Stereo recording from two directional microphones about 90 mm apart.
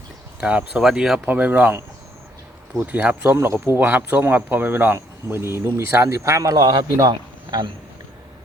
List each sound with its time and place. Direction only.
0.3 s speech: 10° right (ahead or behind)
1.3 s speech: 20° right (ahead or behind)
2.8 s speech: 15° right (ahead or behind)
3.3 s speech: 30° right (ahead or behind)
3.8 s speech: 20° right (ahead or behind); by 6.8 s 50° right (ahead or behind)
7.1 s a sound: 55° right (ahead or behind)